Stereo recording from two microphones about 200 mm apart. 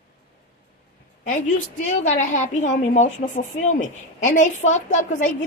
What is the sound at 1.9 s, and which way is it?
A woman's voice, 35° left (ahead or behind).